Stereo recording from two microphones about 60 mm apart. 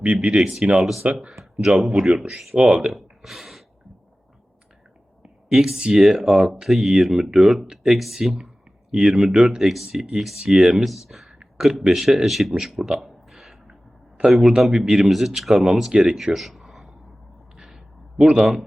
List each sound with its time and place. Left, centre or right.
0.0 s speech: right
1.4 s speech: centre
2.6 s speech: centre
2.9 s gasp: centre
5.5 s speech: centre
9.6 s a man's voice: centre
17.6 s a sound: centre